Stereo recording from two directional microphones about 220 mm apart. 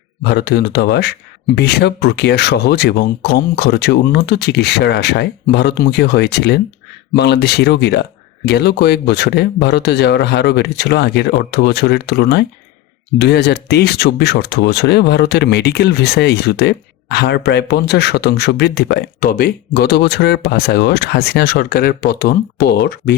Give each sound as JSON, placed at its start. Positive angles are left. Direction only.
{"t": 0.3, "sound": "speech", "side_deg": 50}